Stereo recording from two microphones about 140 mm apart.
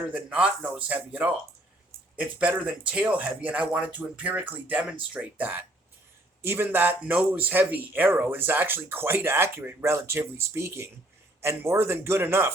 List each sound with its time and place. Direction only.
0.1 s speech: 5° right (ahead or behind)